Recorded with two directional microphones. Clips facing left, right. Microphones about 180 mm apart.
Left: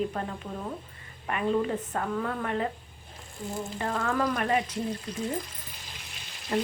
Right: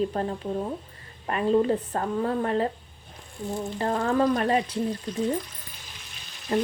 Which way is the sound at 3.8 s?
35° right (ahead or behind).